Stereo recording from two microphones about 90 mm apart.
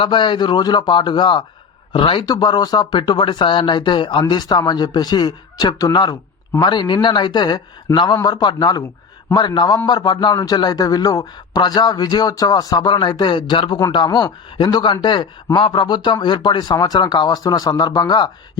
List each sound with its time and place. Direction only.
0.0 s a man's voice: 65° left (ahead or behind)
2.2 s a man's voice: 50° left (ahead or behind)
10.3 s a man's voice: 45° left (ahead or behind)